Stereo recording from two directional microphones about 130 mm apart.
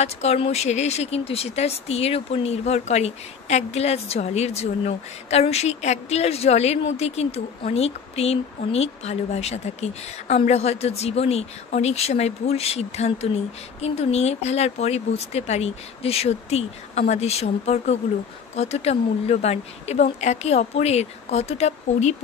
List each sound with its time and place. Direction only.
0.0 s speech: 55° left (ahead or behind)